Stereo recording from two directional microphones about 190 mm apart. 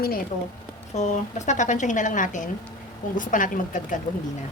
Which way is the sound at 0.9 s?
40° left (ahead or behind).